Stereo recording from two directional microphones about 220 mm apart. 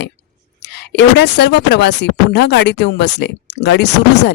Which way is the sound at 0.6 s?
50° left (ahead or behind).